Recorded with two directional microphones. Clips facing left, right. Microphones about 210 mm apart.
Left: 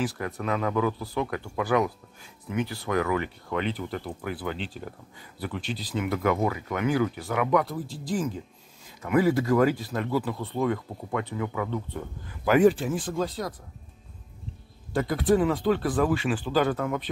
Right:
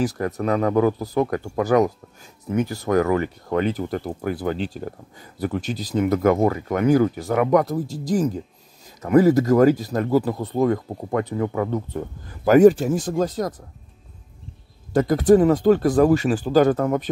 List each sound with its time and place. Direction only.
0.0 s speech: 40° right (ahead or behind)
14.9 s speech: 45° right (ahead or behind)